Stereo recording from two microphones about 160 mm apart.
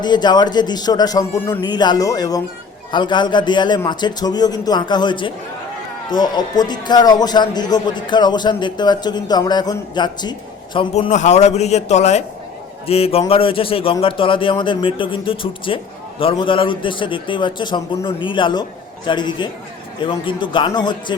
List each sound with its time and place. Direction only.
0.0 s a man's voice: 25° left (ahead or behind)
11.1 s a man's voice: 45° left (ahead or behind); by 21.2 s 30° left (ahead or behind)